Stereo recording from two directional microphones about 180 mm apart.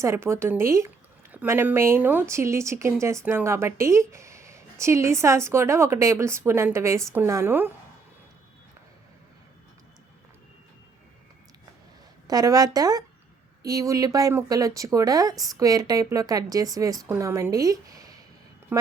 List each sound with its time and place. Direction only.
0.0 s speech: 15° right (ahead or behind)
12.3 s speech: 20° right (ahead or behind)
18.7 s a sound: 10° right (ahead or behind)